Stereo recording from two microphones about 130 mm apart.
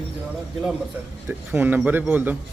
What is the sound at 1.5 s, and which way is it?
Speech, 15° right (ahead or behind).